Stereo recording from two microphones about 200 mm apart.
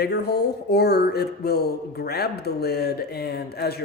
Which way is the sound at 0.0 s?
55° left (ahead or behind).